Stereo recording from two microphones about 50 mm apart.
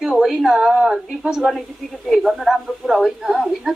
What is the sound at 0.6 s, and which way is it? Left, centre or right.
Speech, centre.